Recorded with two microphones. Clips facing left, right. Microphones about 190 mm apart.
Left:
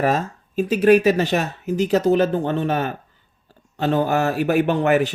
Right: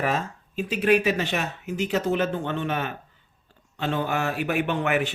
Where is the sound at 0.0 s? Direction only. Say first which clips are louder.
Left 6 dB; 40° left (ahead or behind).